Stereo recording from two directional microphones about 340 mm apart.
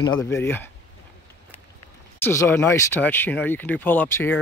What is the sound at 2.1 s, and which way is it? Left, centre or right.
Speech, centre.